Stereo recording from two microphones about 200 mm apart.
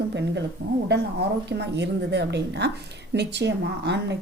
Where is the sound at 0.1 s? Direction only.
60° right (ahead or behind).